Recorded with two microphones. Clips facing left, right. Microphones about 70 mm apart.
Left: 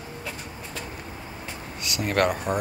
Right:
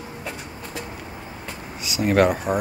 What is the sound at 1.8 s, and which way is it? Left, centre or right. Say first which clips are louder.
Speech: right 5 dB; centre.